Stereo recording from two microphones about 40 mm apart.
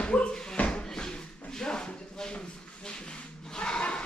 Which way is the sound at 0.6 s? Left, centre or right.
Left.